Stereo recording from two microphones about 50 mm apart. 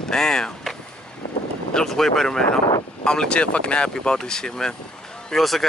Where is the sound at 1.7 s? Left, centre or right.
Centre.